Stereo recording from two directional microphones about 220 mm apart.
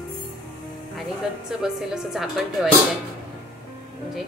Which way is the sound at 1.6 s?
Centre (ahead or behind).